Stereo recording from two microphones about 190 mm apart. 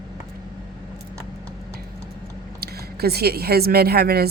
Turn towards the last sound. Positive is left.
turn(degrees=-55)  # may be behind; listen again after turning